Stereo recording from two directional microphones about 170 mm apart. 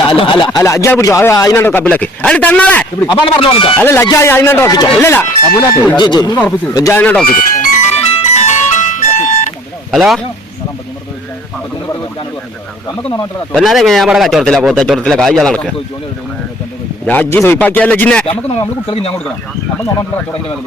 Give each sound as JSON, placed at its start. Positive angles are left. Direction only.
{"t": 0.0, "sound": "speech", "side_deg": 30}
{"t": 3.1, "sound": "speech", "side_deg": 30}
{"t": 3.8, "sound": "speech", "side_deg": 15}
{"t": 7.0, "sound": "speech", "side_deg": 5}
{"t": 7.3, "sound": "music", "side_deg": 45}
{"t": 9.9, "sound": "speech", "side_deg": 0}
{"t": 13.5, "sound": "speech", "side_deg": 0}
{"t": 17.1, "sound": "speech", "side_deg": 10}
{"t": 18.9, "sound": "speech", "side_deg": 35}